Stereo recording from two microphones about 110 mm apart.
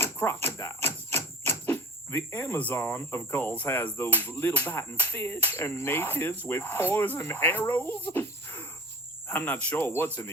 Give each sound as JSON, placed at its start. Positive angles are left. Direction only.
{"t": 0.0, "sound": "speech", "side_deg": 20}
{"t": 3.6, "sound": "music", "side_deg": 15}
{"t": 9.2, "sound": "speech", "side_deg": 20}
{"t": 9.6, "sound": "music", "side_deg": 20}